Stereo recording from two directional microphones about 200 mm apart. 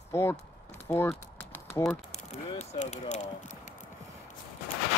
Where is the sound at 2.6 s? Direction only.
35° left (ahead or behind).